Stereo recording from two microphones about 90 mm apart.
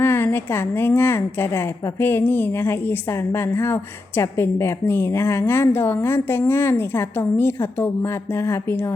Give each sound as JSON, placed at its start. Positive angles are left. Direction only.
{"t": 0.0, "sound": "a woman's voice", "side_deg": 25}